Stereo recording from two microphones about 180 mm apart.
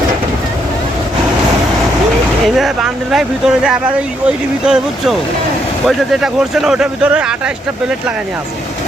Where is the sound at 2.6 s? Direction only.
Centre (ahead or behind).